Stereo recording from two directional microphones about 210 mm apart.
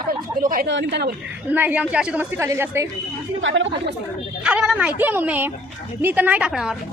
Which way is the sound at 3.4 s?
65° right (ahead or behind).